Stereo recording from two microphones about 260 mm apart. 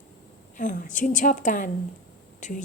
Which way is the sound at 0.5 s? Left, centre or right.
Left.